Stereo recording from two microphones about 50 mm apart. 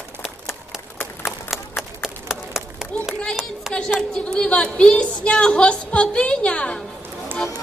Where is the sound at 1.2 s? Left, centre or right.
Centre.